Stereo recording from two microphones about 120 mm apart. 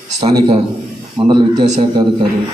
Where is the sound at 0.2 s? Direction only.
50° right (ahead or behind).